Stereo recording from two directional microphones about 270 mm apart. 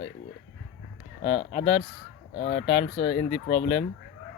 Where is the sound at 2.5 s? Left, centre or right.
Left.